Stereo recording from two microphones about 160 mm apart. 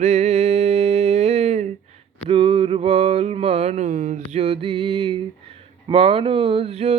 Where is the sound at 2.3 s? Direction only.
35° right (ahead or behind).